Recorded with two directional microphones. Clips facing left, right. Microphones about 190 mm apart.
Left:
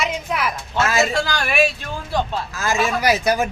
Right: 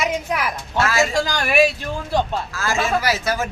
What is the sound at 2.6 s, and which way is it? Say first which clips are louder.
Speech: left 1 dB; 15° left (ahead or behind).